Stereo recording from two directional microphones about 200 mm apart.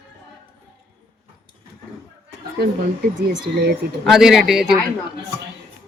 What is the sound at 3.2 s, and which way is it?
Speech, 50° right (ahead or behind).